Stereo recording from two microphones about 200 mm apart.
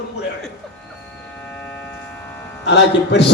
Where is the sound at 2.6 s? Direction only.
60° left (ahead or behind).